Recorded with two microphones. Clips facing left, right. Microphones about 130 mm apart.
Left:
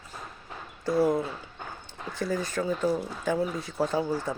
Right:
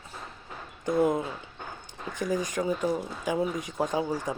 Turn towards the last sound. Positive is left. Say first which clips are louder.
# left 1 dB
turn(degrees=-15)  # may be behind; listen again after turning